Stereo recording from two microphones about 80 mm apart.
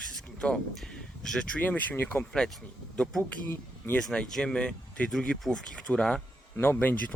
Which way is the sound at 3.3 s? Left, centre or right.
Left.